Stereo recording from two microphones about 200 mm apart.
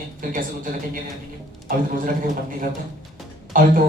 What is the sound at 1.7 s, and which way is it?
Speech, 45° right (ahead or behind).